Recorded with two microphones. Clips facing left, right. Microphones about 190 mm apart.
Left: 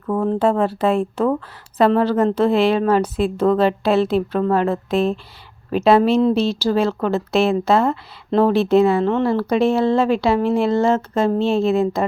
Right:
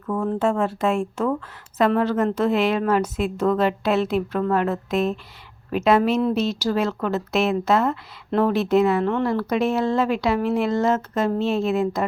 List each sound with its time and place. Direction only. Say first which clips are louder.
0.1 s a woman's voice: left 4 dB; 35° left (ahead or behind)